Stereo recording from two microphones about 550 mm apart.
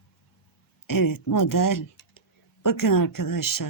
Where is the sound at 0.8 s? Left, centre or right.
Left.